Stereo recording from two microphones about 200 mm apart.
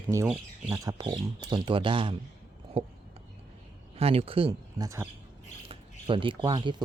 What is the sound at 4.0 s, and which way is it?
Speech, 30° right (ahead or behind).